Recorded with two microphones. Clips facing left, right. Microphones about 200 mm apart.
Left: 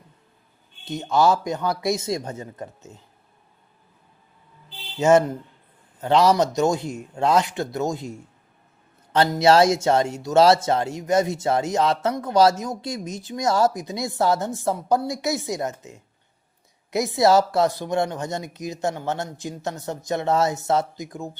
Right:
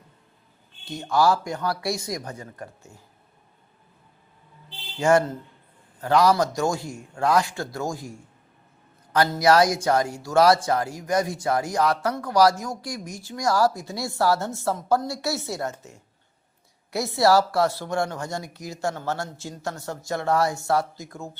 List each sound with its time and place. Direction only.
0.9 s speech: 20° left (ahead or behind)
4.9 s speech: 20° left (ahead or behind)